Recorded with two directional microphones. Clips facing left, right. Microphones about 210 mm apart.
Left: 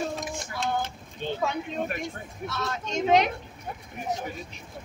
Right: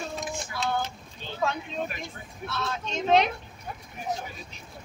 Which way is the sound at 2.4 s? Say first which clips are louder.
Even; 10° left (ahead or behind).